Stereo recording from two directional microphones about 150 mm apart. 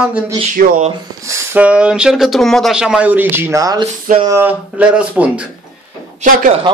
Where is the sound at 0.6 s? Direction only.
70° right (ahead or behind).